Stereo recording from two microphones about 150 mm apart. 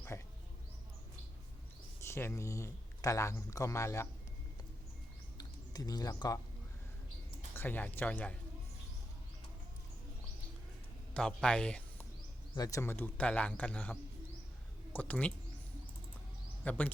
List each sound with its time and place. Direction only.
0.1 s a sound: 20° left (ahead or behind)
2.0 s speech: 15° left (ahead or behind)
5.4 s speech: 25° left (ahead or behind)
7.5 s a man's voice: 15° left (ahead or behind)
11.1 s speech: 5° left (ahead or behind)
12.5 s a man's voice: 20° left (ahead or behind)
16.6 s a man's voice: 10° left (ahead or behind)